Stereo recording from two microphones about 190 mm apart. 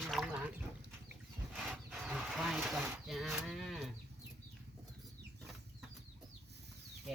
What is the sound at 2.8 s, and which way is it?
Speech, 5° right (ahead or behind).